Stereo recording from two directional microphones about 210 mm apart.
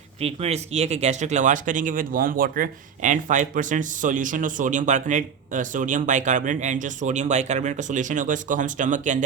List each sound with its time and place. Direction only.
0.2 s speech: 30° right (ahead or behind)